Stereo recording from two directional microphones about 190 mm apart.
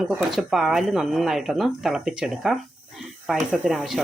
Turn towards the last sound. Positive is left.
turn(degrees=0)  # may be behind; listen again after turning